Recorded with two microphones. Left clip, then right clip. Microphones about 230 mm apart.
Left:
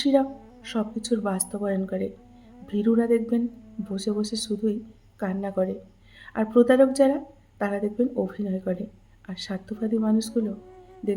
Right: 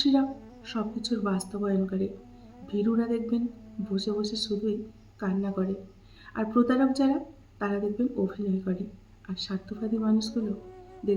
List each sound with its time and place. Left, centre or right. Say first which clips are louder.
0.0 s speech: left 4 dB; left